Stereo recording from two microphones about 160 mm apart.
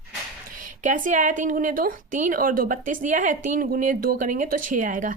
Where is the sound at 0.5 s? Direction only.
55° right (ahead or behind).